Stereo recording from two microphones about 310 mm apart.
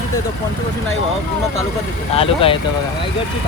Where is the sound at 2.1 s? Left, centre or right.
Centre.